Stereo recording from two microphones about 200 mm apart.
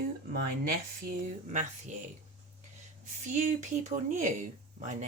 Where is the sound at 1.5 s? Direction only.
40° right (ahead or behind).